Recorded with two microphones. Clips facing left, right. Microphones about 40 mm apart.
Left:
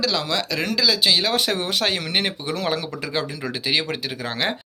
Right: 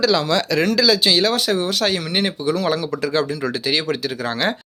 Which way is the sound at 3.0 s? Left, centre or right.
Centre.